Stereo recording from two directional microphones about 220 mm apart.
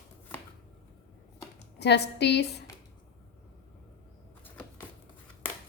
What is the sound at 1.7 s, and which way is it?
Speech, 50° left (ahead or behind).